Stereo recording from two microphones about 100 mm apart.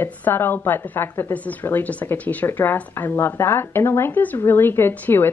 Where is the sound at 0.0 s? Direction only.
20° left (ahead or behind).